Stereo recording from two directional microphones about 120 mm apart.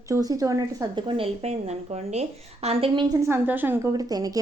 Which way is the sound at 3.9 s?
30° right (ahead or behind).